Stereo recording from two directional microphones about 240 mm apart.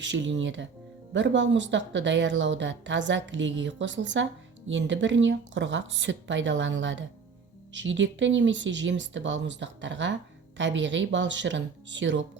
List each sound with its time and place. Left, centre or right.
0.0 s speech: right